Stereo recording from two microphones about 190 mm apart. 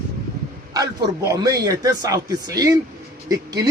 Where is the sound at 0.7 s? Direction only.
20° right (ahead or behind).